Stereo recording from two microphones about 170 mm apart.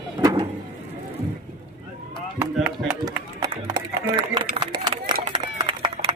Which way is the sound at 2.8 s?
20° right (ahead or behind).